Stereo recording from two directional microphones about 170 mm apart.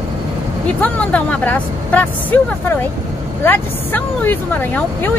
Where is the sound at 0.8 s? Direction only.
10° left (ahead or behind).